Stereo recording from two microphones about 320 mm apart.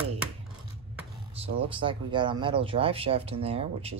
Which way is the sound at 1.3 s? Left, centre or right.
Centre.